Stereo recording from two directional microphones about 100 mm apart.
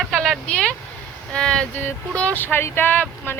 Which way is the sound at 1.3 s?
10° left (ahead or behind).